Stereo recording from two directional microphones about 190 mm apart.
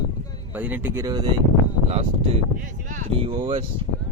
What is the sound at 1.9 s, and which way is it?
Speech, 30° right (ahead or behind).